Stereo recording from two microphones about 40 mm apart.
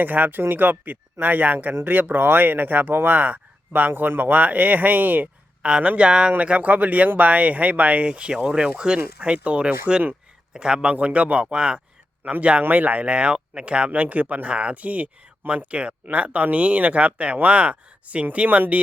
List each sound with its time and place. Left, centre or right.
0.0 s speech: right
3.1 s speech: right
3.7 s speech: right
5.6 s speech: right
6.4 s speech: right
10.5 s speech: right
10.9 s speech: right
11.5 s speech: right
12.2 s speech: right